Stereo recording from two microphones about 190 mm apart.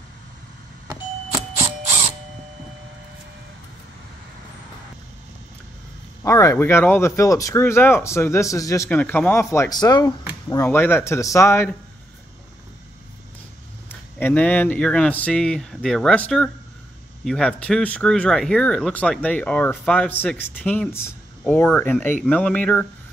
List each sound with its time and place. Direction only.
6.2 s speech: 15° left (ahead or behind)
14.1 s speech: 10° left (ahead or behind)